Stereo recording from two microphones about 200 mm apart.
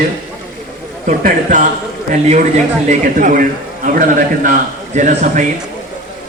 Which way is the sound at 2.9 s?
40° right (ahead or behind).